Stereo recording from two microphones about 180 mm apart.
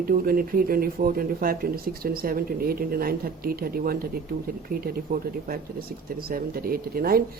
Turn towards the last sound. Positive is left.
turn(degrees=-55)  # may be behind; listen again after turning